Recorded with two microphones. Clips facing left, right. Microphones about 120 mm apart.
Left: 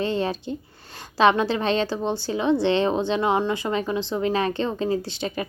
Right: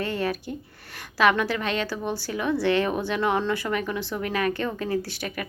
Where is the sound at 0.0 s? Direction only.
25° left (ahead or behind).